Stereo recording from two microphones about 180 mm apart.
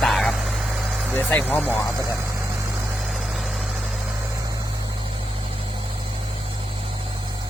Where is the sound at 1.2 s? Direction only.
10° left (ahead or behind).